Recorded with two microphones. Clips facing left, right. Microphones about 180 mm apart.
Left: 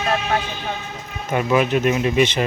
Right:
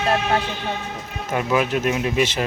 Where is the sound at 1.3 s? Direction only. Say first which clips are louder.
Left 3 dB; centre (ahead or behind).